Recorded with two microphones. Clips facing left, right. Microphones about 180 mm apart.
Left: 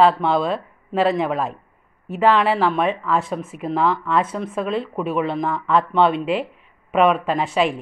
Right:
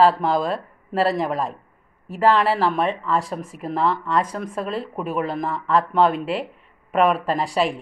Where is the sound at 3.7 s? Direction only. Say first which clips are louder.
Left 1 dB; 35° right (ahead or behind).